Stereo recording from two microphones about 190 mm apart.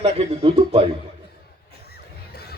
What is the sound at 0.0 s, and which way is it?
Speech, 35° right (ahead or behind).